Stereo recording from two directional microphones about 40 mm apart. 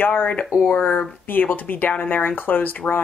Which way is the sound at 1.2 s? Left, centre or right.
Left.